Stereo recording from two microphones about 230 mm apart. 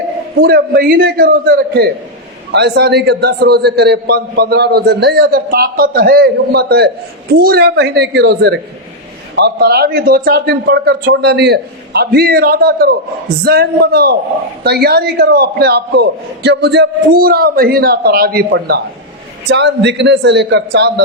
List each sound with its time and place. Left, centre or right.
0.4 s a man's voice: right